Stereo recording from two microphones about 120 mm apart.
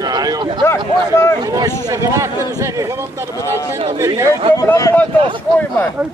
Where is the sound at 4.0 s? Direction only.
25° right (ahead or behind).